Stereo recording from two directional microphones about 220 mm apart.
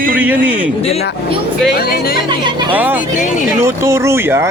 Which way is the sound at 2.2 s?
20° right (ahead or behind).